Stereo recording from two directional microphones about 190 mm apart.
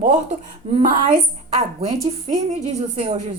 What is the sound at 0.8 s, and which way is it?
Speech, 45° right (ahead or behind).